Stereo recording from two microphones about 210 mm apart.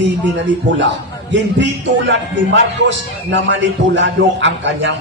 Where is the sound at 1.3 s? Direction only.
60° right (ahead or behind).